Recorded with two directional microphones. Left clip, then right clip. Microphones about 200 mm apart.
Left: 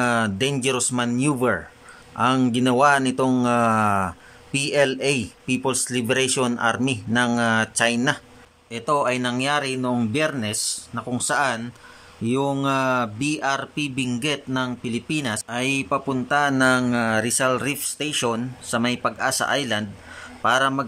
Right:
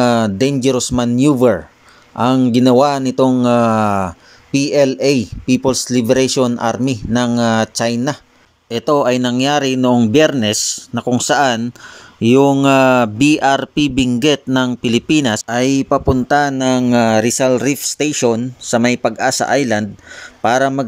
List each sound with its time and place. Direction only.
0.0 s speech: 25° right (ahead or behind)